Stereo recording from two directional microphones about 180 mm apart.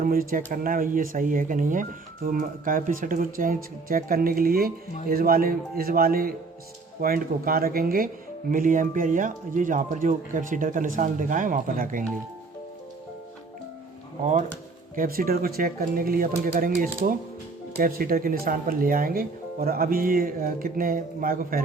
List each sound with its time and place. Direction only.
0.0 s speech: 50° right (ahead or behind)
14.9 s speech: 50° right (ahead or behind)